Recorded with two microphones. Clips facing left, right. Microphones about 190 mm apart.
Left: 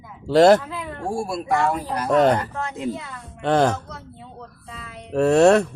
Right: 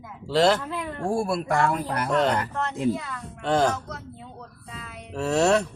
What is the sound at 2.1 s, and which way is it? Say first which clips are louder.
Speech: left 6 dB; 50° left (ahead or behind).